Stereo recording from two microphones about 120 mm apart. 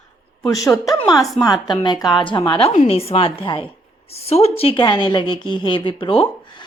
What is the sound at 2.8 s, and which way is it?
Speech, 55° left (ahead or behind).